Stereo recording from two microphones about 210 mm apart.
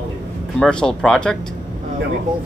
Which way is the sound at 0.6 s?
5° left (ahead or behind).